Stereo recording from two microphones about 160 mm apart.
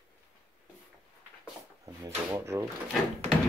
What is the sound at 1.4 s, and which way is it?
Drawer open or close, 20° right (ahead or behind).